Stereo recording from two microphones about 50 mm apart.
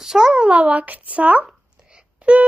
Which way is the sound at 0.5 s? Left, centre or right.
Right.